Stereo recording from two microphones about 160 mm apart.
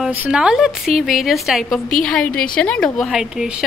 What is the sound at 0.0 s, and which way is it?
A woman's voice, 10° right (ahead or behind).